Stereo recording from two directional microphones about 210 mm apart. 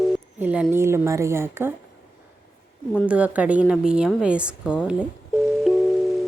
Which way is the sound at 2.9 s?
5° right (ahead or behind).